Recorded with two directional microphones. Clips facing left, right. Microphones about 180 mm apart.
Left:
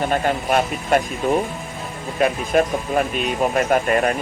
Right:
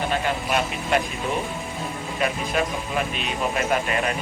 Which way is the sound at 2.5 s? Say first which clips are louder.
Left 7 dB; 45° left (ahead or behind).